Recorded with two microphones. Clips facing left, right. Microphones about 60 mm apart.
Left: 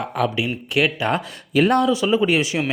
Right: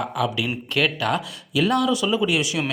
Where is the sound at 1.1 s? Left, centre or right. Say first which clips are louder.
Left 2 dB; left.